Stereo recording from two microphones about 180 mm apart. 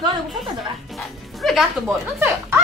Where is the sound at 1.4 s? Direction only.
Centre (ahead or behind).